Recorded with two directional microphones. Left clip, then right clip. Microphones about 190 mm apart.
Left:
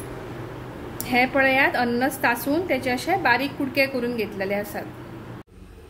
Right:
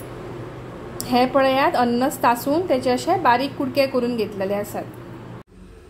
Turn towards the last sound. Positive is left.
turn(degrees=-20)  # may be behind; listen again after turning